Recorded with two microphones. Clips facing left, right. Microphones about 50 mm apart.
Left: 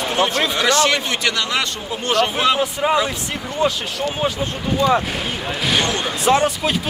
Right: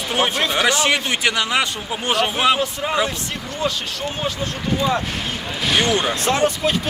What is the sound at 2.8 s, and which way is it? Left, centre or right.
Speech, centre.